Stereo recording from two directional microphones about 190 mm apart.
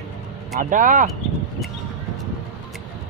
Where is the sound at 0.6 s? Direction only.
45° right (ahead or behind).